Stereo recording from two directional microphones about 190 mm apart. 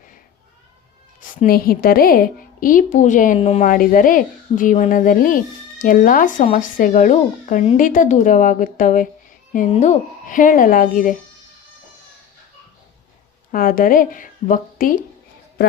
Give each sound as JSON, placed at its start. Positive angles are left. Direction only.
{"t": 1.2, "sound": "a woman's voice", "side_deg": 50}
{"t": 13.5, "sound": "a woman's voice", "side_deg": 45}